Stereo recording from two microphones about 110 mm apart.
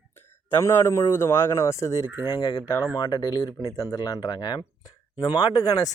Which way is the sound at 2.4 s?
45° left (ahead or behind).